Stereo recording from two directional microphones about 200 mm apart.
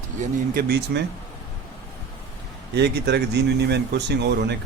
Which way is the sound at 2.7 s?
55° right (ahead or behind).